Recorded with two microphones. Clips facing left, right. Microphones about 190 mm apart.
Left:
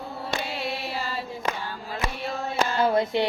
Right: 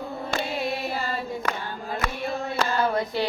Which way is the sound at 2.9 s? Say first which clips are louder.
Left 3 dB; 20° left (ahead or behind).